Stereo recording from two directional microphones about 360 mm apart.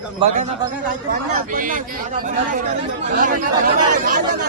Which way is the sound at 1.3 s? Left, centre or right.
Right.